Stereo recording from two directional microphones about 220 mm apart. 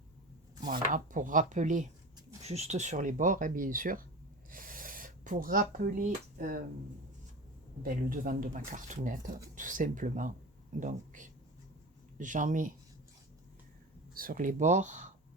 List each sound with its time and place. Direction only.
0.7 s speech: 35° right (ahead or behind)
4.5 s a sound: 40° right (ahead or behind)
7.8 s speech: 40° right (ahead or behind)
14.1 s speech: 40° right (ahead or behind)